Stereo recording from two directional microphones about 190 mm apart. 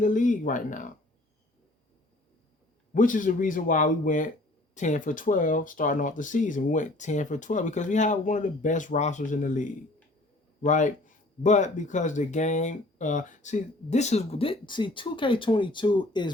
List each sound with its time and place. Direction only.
0.0 s speech: 40° left (ahead or behind)
2.9 s speech: 45° left (ahead or behind); by 16.3 s 25° left (ahead or behind)